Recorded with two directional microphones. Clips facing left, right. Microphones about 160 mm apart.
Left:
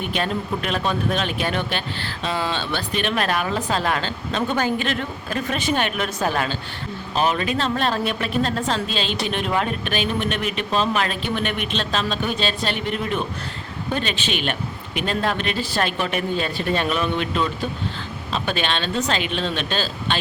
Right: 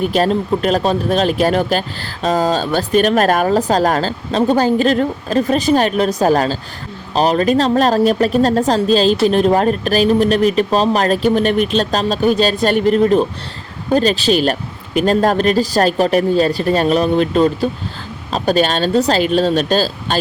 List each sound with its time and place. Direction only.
0.0 s speech: 40° right (ahead or behind)